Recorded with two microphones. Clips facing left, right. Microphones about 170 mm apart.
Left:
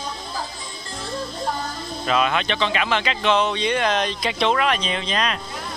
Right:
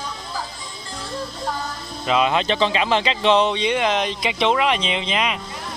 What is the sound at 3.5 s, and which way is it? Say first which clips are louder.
Speech: right 1 dB; 15° right (ahead or behind).